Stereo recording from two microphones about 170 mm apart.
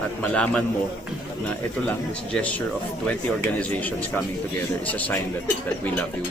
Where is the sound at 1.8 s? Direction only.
10° left (ahead or behind).